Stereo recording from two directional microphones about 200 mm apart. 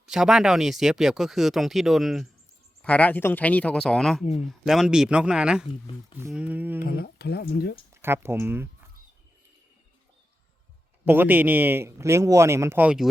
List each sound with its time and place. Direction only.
0.1 s speech: centre (ahead or behind)
6.8 s speech: 50° left (ahead or behind)
8.0 s speech: 10° right (ahead or behind)
11.0 s speech: 10° right (ahead or behind)